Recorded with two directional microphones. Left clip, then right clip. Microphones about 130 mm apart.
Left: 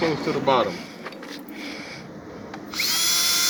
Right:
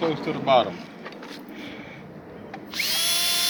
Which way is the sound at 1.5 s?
10° left (ahead or behind).